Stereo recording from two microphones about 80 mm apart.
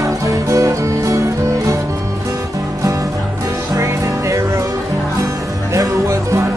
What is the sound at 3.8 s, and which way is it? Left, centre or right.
Music, right.